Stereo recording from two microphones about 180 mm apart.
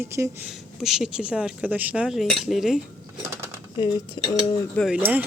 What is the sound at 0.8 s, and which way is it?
Speech, centre (ahead or behind).